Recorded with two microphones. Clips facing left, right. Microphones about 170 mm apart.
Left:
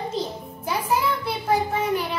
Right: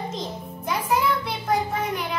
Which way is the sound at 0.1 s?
5° left (ahead or behind).